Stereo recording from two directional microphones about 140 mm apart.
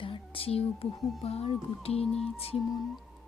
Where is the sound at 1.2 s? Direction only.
50° left (ahead or behind).